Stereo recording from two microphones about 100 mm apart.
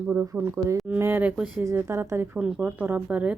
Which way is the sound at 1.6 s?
25° right (ahead or behind).